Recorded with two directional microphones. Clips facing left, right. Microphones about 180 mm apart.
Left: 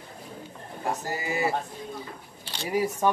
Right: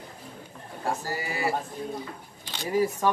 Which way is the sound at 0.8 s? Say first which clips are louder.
Even; 20° left (ahead or behind).